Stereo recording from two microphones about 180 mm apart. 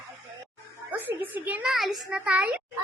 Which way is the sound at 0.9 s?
10° right (ahead or behind).